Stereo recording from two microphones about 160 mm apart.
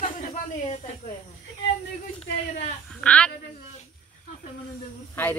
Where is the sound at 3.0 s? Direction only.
5° left (ahead or behind).